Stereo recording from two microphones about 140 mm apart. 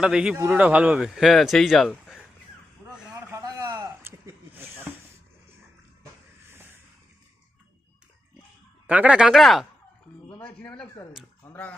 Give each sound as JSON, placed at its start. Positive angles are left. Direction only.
{"t": 0.0, "sound": "speech", "side_deg": -5}
{"t": 2.9, "sound": "a sound", "side_deg": -10}
{"t": 4.5, "sound": "snake", "side_deg": -15}
{"t": 8.9, "sound": "speech", "side_deg": -10}
{"t": 10.4, "sound": "speech", "side_deg": 10}
{"t": 11.4, "sound": "a sound", "side_deg": 10}